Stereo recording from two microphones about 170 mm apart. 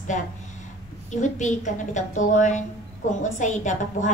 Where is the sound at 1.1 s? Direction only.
45° left (ahead or behind).